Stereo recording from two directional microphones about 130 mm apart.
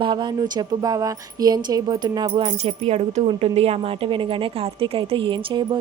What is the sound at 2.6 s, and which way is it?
Speech, 50° right (ahead or behind).